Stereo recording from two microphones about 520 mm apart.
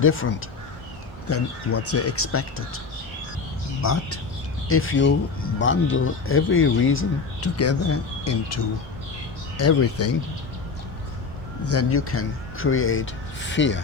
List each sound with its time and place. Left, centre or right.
0.0 s speech: left
1.3 s speech: left
3.8 s speech: left
11.6 s speech: left